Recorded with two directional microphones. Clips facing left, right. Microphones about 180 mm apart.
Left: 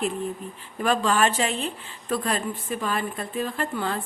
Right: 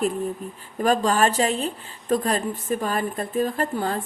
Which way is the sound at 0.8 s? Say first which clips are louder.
Right 2 dB; 40° right (ahead or behind).